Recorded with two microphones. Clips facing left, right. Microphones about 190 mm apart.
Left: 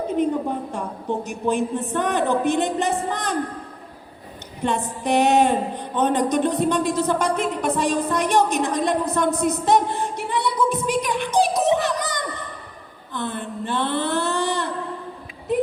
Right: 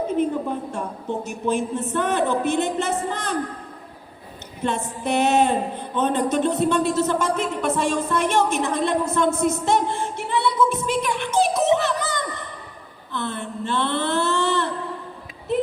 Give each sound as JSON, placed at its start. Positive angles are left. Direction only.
{"t": 1.2, "sound": "a woman's voice", "side_deg": 15}
{"t": 4.6, "sound": "a woman's voice", "side_deg": 15}
{"t": 7.4, "sound": "a sound", "side_deg": 15}